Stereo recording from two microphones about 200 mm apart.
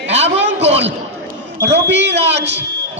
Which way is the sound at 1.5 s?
60° right (ahead or behind).